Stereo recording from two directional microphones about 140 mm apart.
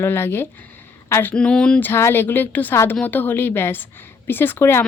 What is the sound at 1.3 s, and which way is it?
Speech, 5° left (ahead or behind).